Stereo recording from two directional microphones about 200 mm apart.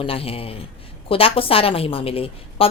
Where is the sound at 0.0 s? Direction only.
30° left (ahead or behind).